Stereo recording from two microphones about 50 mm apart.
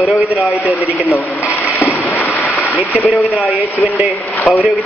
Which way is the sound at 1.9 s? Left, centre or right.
Left.